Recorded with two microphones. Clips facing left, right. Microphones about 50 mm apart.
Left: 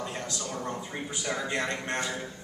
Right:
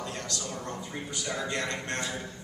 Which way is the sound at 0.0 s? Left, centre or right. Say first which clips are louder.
Left 1 dB; centre.